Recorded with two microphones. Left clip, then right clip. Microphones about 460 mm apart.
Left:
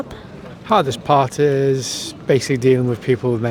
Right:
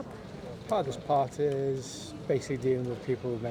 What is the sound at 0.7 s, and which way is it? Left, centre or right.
Speech, left.